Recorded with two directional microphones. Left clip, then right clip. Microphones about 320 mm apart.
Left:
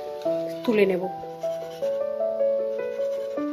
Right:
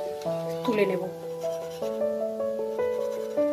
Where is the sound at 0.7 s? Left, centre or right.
Left.